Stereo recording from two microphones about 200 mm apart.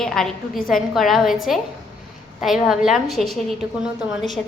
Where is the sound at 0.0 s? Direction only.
Centre (ahead or behind).